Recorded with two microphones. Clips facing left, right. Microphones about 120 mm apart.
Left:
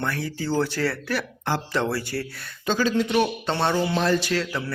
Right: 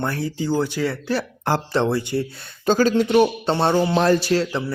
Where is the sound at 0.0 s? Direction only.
30° right (ahead or behind).